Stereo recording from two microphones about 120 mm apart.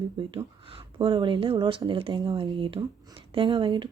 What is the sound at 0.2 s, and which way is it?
Speech, 45° right (ahead or behind).